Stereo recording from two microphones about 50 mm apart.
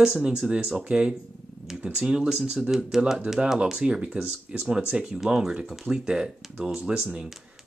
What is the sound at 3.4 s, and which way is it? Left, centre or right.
Speech, centre.